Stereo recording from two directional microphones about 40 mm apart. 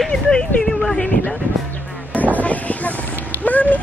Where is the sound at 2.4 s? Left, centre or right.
Left.